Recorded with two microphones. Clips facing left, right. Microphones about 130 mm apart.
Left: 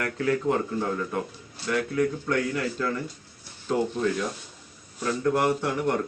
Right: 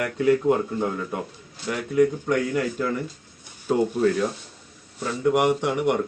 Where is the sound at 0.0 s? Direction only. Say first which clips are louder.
Right 5 dB; 15° right (ahead or behind).